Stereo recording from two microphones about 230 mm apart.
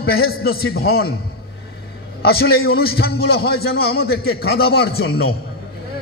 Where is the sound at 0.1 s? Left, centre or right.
Left.